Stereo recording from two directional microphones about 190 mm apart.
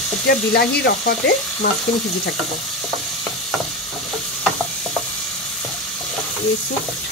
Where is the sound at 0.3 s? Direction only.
55° left (ahead or behind).